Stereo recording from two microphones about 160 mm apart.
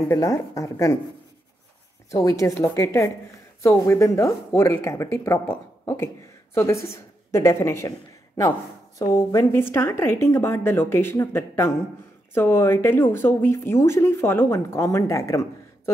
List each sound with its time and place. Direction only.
0.1 s a woman's voice: 20° left (ahead or behind)
2.0 s a woman's voice: 20° left (ahead or behind)